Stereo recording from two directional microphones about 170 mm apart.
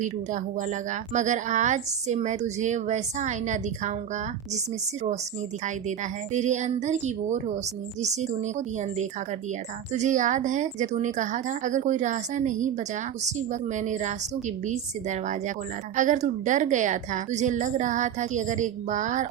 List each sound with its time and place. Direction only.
0.0 s a woman's voice: 45° right (ahead or behind)
5.6 s a woman's voice: 45° right (ahead or behind)